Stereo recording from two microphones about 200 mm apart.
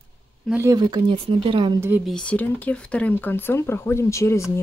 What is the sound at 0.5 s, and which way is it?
Speech, 10° right (ahead or behind).